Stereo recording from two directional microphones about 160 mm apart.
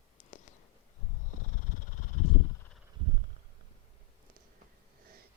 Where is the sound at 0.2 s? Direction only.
50° left (ahead or behind).